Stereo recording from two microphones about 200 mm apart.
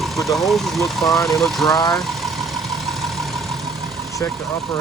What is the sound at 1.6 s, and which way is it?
Speech, 20° left (ahead or behind).